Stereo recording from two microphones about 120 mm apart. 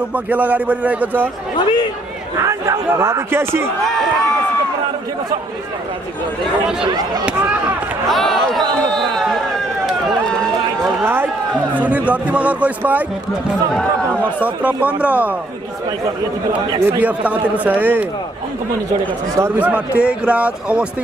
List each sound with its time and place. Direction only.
0.1 s speech: 10° right (ahead or behind)
2.3 s speech: 30° right (ahead or behind)
3.8 s speech: centre (ahead or behind)
6.9 s speech: 35° right (ahead or behind)
8.1 s speech: centre (ahead or behind)
8.9 s a sound: centre (ahead or behind)
11.7 s speech: 10° right (ahead or behind)
14.4 s speech: 15° right (ahead or behind)
16.8 s speech: 10° right (ahead or behind)
19.3 s speech: 15° right (ahead or behind)